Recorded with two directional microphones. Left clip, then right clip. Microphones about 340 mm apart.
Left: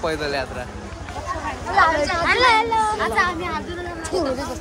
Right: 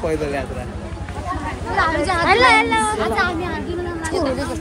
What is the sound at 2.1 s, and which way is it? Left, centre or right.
Speech, right.